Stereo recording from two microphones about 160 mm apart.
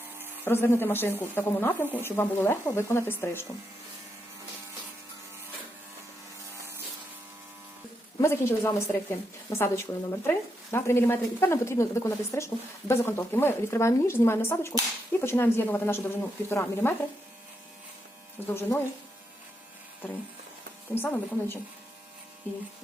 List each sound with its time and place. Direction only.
0.4 s speech: 15° left (ahead or behind)
8.2 s speech: 15° left (ahead or behind)
18.4 s speech: 15° left (ahead or behind)
20.9 s speech: 15° left (ahead or behind)